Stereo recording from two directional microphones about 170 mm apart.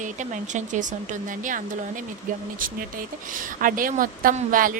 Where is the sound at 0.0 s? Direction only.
45° right (ahead or behind).